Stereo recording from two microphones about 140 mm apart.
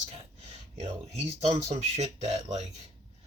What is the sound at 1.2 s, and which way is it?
Speech, 50° right (ahead or behind).